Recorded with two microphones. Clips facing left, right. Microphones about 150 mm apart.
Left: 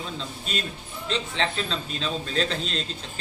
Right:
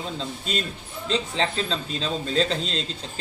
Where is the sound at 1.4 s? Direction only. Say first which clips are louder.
Right 2 dB; 35° right (ahead or behind).